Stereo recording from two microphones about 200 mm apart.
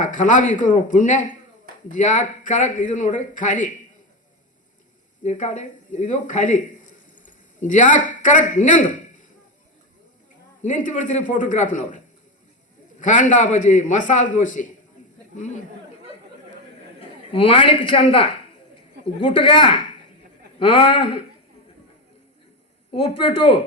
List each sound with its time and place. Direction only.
0.1 s a man's voice: 40° left (ahead or behind)
5.2 s a man's voice: 35° left (ahead or behind)
10.6 s a man's voice: 40° left (ahead or behind)
17.0 s a man's voice: 25° left (ahead or behind)
23.0 s speech: 25° left (ahead or behind)